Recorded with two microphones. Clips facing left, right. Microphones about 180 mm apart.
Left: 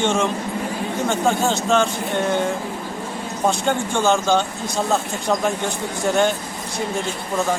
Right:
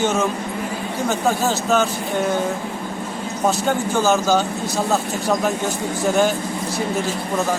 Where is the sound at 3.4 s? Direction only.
5° right (ahead or behind).